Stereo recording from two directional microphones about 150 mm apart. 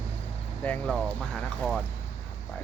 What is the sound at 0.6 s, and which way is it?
Speech, 10° left (ahead or behind).